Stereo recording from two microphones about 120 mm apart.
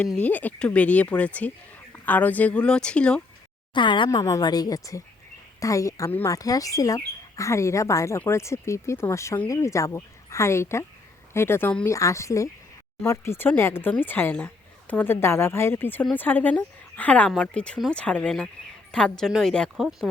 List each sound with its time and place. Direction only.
0.2 s speech: 15° left (ahead or behind)
3.8 s a woman's voice: 40° left (ahead or behind); by 20.1 s centre (ahead or behind)